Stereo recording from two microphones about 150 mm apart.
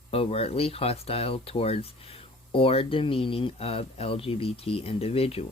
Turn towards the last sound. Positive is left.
turn(degrees=40)  # may be behind; listen again after turning